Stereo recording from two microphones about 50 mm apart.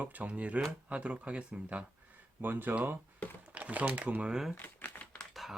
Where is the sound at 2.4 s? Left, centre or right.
Right.